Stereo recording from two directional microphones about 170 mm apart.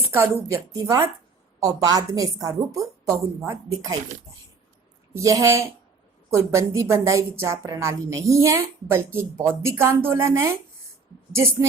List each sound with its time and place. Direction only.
0.1 s a woman's voice: 15° right (ahead or behind)
5.1 s speech: 20° right (ahead or behind)